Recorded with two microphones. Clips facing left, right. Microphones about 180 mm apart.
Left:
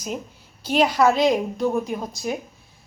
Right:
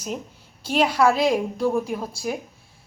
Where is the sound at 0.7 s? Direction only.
5° right (ahead or behind).